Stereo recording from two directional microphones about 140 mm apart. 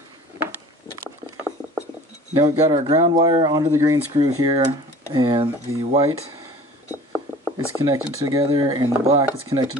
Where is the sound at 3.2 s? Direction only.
30° right (ahead or behind).